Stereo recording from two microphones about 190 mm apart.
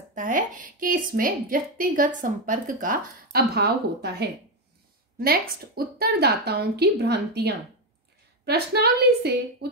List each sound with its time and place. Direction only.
0.1 s a woman's voice: 45° right (ahead or behind)